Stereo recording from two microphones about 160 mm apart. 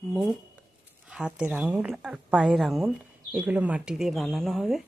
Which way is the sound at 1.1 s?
5° right (ahead or behind).